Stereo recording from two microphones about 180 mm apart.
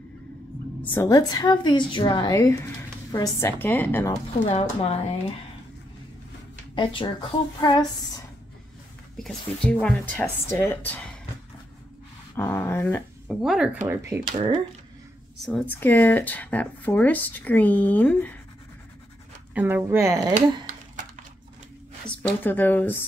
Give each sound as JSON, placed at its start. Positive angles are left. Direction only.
{"t": 0.9, "sound": "a woman's voice", "side_deg": 20}
{"t": 4.5, "sound": "speech", "side_deg": 35}
{"t": 6.7, "sound": "a woman's voice", "side_deg": 25}
{"t": 9.1, "sound": "speech", "side_deg": 5}
{"t": 12.4, "sound": "speech", "side_deg": 15}
{"t": 13.4, "sound": "speech", "side_deg": -5}
{"t": 15.4, "sound": "speech", "side_deg": 5}
{"t": 19.5, "sound": "speech", "side_deg": -10}
{"t": 20.6, "sound": "typing", "side_deg": -45}
{"t": 22.0, "sound": "speech", "side_deg": 10}